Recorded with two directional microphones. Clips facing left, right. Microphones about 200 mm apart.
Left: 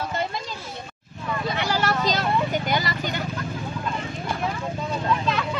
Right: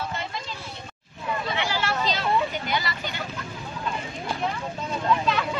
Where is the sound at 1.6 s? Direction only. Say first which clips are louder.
Left 6 dB; 40° left (ahead or behind).